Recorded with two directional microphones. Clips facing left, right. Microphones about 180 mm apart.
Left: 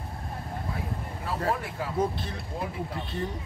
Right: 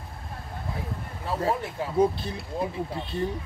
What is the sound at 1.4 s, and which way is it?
Speech, 25° right (ahead or behind).